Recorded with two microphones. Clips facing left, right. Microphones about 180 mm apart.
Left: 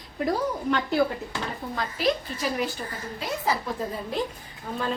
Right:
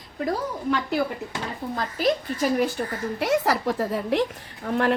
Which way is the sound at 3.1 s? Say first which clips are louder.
Right 6 dB; 75° right (ahead or behind).